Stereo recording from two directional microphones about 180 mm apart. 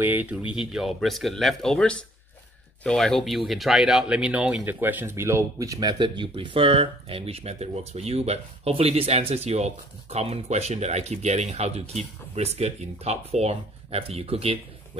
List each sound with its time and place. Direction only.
0.0 s speech: 10° right (ahead or behind); by 14.6 s 35° right (ahead or behind)